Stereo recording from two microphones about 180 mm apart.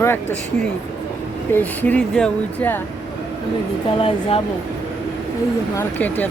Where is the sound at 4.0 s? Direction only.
30° left (ahead or behind).